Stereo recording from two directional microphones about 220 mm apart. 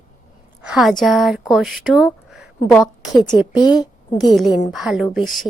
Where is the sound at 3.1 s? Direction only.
20° left (ahead or behind).